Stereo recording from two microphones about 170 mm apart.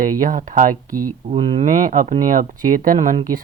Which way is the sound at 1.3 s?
35° right (ahead or behind).